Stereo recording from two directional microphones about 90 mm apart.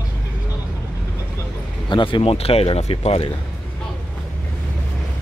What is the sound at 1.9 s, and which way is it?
Speech, 70° left (ahead or behind).